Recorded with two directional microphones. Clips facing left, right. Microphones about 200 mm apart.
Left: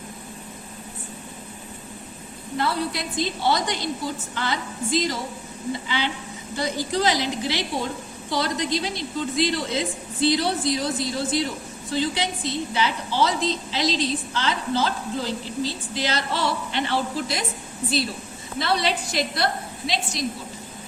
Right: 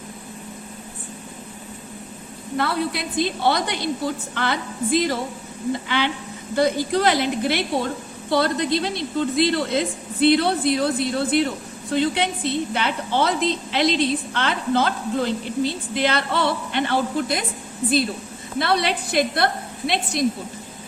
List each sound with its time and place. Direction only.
2.6 s a woman's voice: 60° right (ahead or behind)
18.6 s a woman's voice: 55° right (ahead or behind)